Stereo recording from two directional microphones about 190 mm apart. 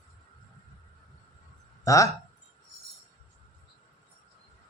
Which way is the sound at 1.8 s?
15° left (ahead or behind).